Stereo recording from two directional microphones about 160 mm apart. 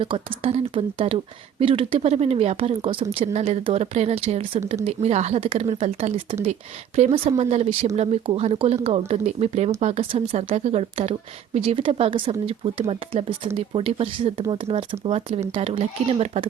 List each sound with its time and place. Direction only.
0.0 s speech: 35° right (ahead or behind)